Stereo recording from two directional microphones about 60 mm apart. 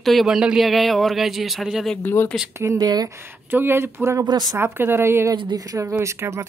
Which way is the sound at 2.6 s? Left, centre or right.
Right.